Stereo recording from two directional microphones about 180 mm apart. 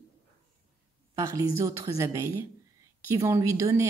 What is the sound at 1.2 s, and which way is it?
Speech, 15° right (ahead or behind).